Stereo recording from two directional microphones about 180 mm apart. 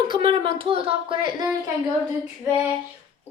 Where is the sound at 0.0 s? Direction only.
30° right (ahead or behind).